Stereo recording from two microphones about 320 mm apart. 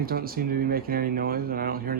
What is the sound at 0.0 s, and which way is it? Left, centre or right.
Speech, right.